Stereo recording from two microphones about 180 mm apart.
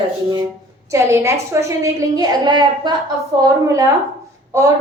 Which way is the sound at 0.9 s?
15° right (ahead or behind).